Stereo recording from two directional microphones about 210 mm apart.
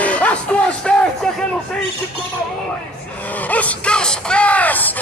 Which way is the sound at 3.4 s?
5° left (ahead or behind).